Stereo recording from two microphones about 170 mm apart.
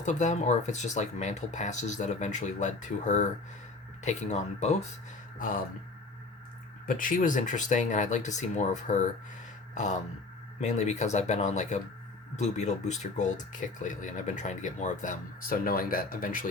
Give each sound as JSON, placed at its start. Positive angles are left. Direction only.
{"t": 0.0, "sound": "speech", "side_deg": 45}
{"t": 5.4, "sound": "speech", "side_deg": 55}
{"t": 6.8, "sound": "speech", "side_deg": 55}